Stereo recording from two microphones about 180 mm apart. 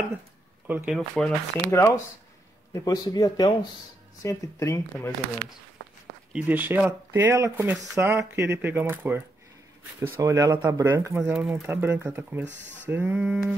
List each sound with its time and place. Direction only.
0.7 s speech: 10° right (ahead or behind)
0.9 s speech: centre (ahead or behind)
1.7 s speech: 15° left (ahead or behind)
6.3 s speech: 10° right (ahead or behind)